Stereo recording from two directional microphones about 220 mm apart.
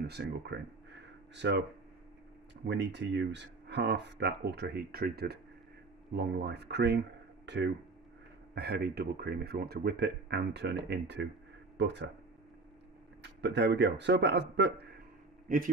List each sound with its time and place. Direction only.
0.0 s speech: 50° right (ahead or behind)
2.6 s speech: 50° right (ahead or behind)
13.2 s speech: 50° right (ahead or behind)
15.4 s a man's voice: 40° right (ahead or behind)